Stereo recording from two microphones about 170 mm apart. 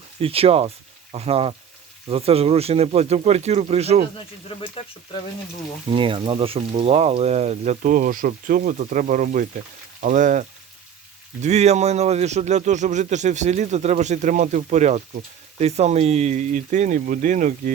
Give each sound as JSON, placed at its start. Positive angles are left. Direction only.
{"t": 0.2, "sound": "speech", "side_deg": -35}
{"t": 4.4, "sound": "speech", "side_deg": 35}
{"t": 5.9, "sound": "a man's voice", "side_deg": -30}